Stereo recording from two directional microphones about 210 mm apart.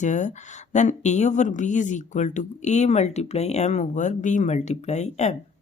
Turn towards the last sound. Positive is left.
turn(degrees=30)  # may be behind; listen again after turning